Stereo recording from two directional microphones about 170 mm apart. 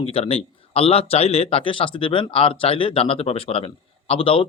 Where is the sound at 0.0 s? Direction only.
35° left (ahead or behind).